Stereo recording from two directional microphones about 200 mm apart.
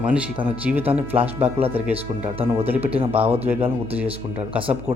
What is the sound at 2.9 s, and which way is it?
Speech, 10° right (ahead or behind).